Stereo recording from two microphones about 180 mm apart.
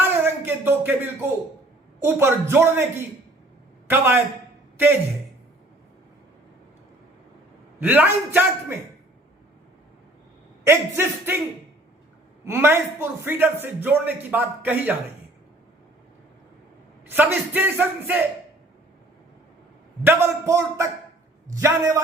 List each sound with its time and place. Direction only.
0.0 s a sound: 10° right (ahead or behind)
2.0 s speech: 15° right (ahead or behind)
7.8 s speech: 10° right (ahead or behind)
10.6 s speech: 15° right (ahead or behind)
12.5 s speech: 15° right (ahead or behind)
17.1 s speech: 10° right (ahead or behind)
20.1 s speech: 15° right (ahead or behind)